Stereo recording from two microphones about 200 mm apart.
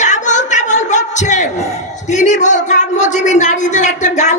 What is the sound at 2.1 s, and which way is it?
A man's voice, 35° left (ahead or behind).